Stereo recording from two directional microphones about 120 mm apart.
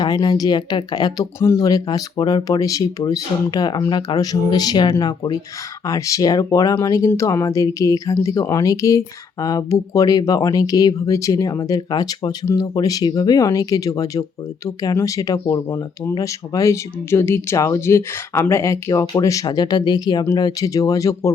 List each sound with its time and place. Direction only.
0.0 s speech: 35° left (ahead or behind)